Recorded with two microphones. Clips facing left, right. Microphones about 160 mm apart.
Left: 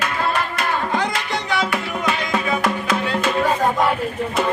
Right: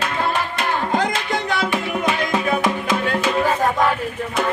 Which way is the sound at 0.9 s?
50° right (ahead or behind).